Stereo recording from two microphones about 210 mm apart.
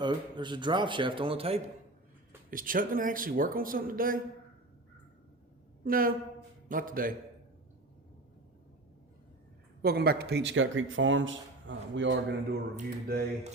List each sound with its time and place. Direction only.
0.0 s speech: 20° right (ahead or behind)
2.5 s speech: 40° right (ahead or behind)
5.8 s speech: 45° right (ahead or behind)
9.8 s speech: 45° right (ahead or behind)
12.7 s speech: 45° right (ahead or behind)